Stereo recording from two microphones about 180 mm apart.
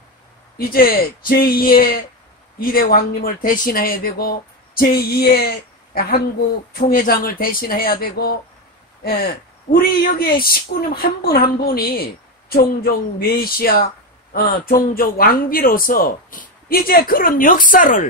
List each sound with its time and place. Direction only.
0.6 s speech: 55° left (ahead or behind)
6.7 s speech: 55° left (ahead or behind)